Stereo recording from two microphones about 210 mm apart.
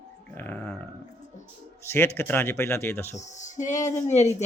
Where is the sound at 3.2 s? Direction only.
35° left (ahead or behind).